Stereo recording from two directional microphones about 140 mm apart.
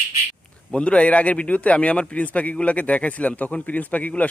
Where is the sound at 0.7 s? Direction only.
10° left (ahead or behind).